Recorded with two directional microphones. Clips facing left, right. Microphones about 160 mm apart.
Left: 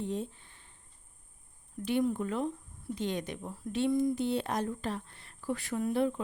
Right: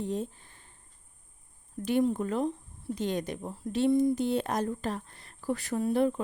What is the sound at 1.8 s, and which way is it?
A woman's voice, 40° right (ahead or behind).